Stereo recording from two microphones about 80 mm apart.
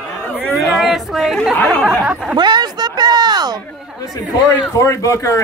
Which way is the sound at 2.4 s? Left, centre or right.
Right.